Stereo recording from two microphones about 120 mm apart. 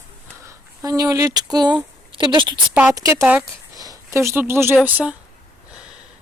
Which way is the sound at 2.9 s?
25° right (ahead or behind).